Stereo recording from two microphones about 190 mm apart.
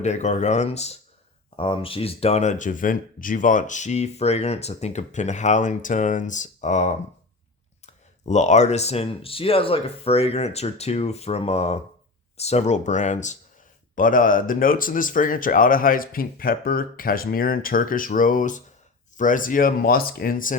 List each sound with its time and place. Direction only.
0.0 s speech: 35° left (ahead or behind)
8.2 s speech: 40° left (ahead or behind)